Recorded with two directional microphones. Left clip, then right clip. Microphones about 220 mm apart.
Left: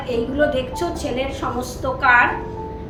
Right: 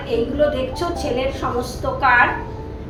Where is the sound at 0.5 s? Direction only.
20° left (ahead or behind).